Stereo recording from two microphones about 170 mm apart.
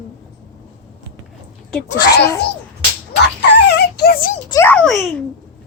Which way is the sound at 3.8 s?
70° left (ahead or behind).